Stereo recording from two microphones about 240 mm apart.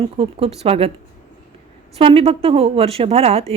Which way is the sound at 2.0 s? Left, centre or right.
Right.